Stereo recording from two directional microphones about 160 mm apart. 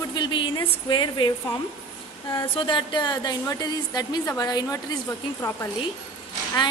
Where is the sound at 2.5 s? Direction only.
30° left (ahead or behind).